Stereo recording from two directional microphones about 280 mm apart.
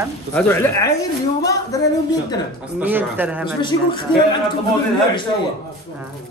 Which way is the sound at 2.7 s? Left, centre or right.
Centre.